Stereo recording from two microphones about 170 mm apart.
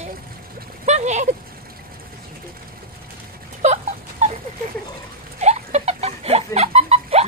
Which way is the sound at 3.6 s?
40° right (ahead or behind).